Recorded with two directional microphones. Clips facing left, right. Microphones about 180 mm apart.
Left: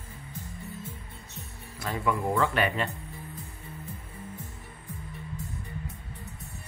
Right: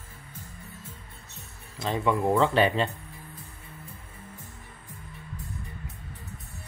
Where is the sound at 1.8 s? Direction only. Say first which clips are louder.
Right 3 dB; 25° right (ahead or behind).